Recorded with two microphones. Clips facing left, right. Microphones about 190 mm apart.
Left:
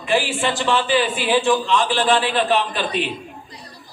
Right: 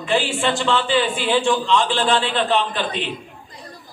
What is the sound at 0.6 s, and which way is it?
Speech, 15° left (ahead or behind).